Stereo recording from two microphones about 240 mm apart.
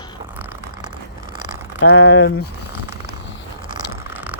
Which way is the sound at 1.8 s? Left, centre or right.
Left.